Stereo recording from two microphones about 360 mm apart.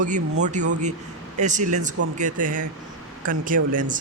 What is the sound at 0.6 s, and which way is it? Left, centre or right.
Speech, right.